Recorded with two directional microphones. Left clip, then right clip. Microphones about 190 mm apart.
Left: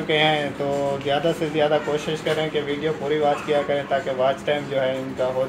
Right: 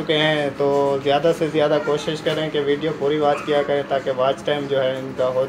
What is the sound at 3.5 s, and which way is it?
Speech, 45° right (ahead or behind).